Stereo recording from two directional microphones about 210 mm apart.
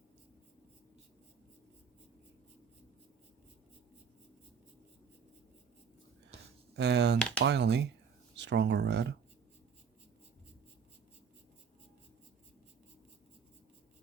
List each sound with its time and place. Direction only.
6.7 s speech: 55° right (ahead or behind)